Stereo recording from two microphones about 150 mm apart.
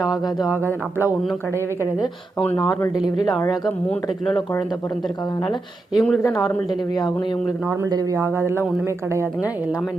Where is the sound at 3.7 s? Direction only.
10° left (ahead or behind).